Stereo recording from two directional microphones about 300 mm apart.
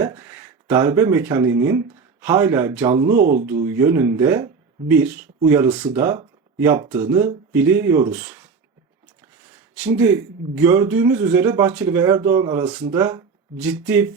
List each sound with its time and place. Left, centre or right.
0.0 s speech: centre
3.2 s speech: right
3.4 s speech: centre
9.5 s a sound: centre
10.6 s speech: centre